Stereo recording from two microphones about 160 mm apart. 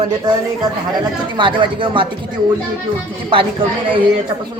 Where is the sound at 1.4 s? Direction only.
30° right (ahead or behind).